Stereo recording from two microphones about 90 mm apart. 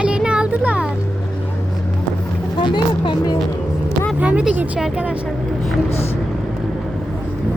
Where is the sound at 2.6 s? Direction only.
55° left (ahead or behind).